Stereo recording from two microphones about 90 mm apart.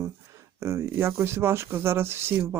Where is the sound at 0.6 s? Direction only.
30° right (ahead or behind).